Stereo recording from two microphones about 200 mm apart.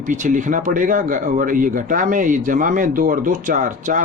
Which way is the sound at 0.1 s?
40° right (ahead or behind).